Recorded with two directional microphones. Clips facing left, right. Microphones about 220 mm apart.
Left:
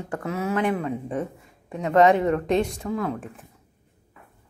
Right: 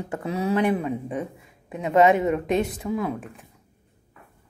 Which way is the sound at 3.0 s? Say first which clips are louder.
Even; centre (ahead or behind).